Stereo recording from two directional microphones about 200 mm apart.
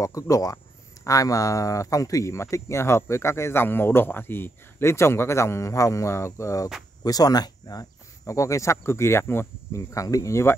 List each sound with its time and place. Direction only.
0.0 s speech: 15° left (ahead or behind)